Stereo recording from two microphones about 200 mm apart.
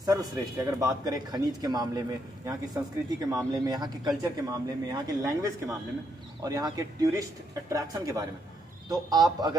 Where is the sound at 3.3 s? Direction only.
20° right (ahead or behind).